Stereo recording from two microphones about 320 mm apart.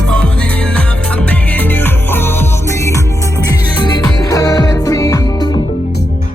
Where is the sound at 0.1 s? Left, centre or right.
Centre.